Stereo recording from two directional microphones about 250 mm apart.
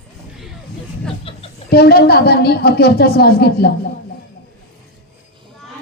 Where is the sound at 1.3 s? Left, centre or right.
Left.